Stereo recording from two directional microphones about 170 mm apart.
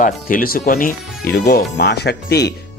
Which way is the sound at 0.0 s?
55° left (ahead or behind).